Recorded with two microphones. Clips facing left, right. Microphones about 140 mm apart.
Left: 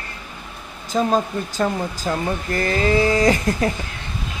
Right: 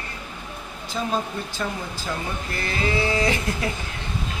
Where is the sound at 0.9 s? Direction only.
45° left (ahead or behind).